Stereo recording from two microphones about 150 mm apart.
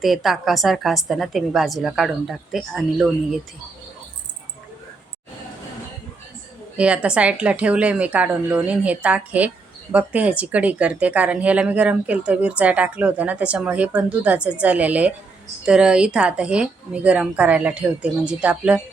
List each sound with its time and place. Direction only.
0.0 s a woman's voice: centre (ahead or behind)
6.7 s speech: 10° right (ahead or behind)